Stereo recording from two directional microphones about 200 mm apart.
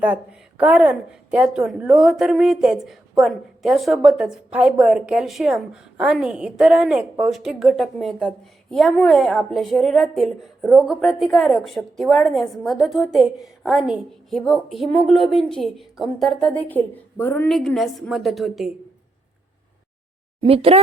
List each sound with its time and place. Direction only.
0.0 s a woman's voice: 5° right (ahead or behind)
20.4 s speech: 30° right (ahead or behind)